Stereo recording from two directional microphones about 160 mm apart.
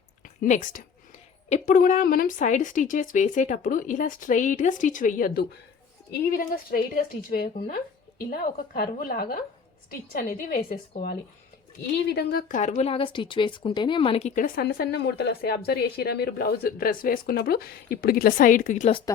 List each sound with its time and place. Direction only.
0.4 s speech: 50° left (ahead or behind)
12.0 s speech: 90° left; by 12.5 s 70° left (ahead or behind)
12.5 s speech: 50° left (ahead or behind)